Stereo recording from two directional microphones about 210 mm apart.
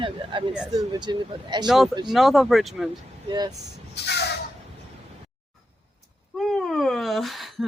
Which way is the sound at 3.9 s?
50° left (ahead or behind).